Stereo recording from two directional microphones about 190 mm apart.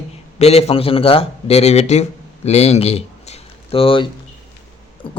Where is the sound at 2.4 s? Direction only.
35° left (ahead or behind).